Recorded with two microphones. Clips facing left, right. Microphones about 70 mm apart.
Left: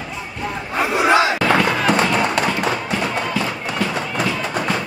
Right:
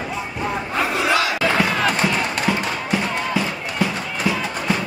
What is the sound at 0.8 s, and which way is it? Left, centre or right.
Battle cry, left.